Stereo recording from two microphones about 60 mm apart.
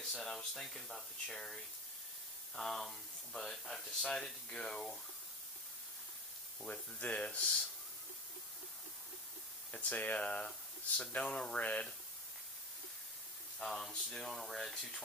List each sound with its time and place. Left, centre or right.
0.0 s speech: centre
6.6 s speech: left
9.7 s speech: left
13.7 s speech: centre